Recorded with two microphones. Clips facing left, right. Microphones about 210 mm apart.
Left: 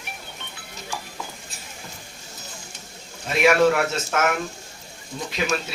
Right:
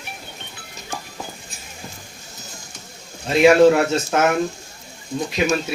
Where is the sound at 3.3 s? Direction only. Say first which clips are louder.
Right 6 dB; 30° right (ahead or behind).